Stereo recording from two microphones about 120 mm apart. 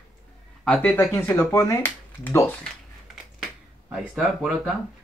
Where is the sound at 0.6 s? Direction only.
10° left (ahead or behind).